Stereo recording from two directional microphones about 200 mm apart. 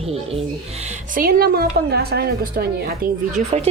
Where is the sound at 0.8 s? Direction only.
45° right (ahead or behind).